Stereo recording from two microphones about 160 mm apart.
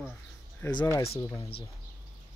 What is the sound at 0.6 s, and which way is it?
Speech, 20° left (ahead or behind).